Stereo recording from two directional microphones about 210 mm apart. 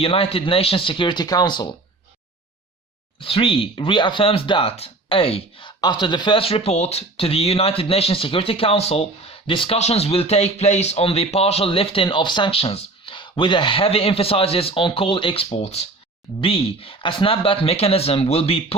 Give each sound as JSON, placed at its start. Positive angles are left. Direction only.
{"t": 0.0, "sound": "speech", "side_deg": 25}
{"t": 3.2, "sound": "speech", "side_deg": 25}